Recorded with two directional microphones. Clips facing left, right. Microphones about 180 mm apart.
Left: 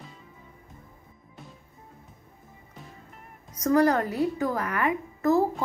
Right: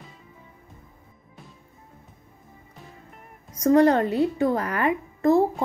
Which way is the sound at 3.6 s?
30° right (ahead or behind).